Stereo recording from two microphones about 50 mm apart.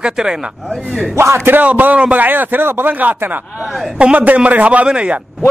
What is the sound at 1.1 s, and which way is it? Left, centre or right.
Speech, right.